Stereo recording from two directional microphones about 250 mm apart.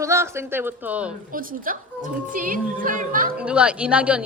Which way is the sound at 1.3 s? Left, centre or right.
Right.